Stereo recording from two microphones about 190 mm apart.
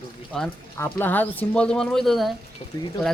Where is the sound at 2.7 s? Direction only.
20° left (ahead or behind).